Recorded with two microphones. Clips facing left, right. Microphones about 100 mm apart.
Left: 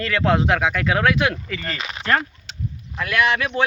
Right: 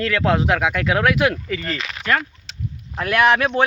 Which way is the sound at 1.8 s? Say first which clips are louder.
Left 2 dB; 30° left (ahead or behind).